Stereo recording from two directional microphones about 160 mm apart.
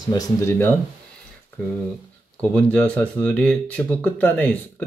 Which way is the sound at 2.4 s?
10° left (ahead or behind).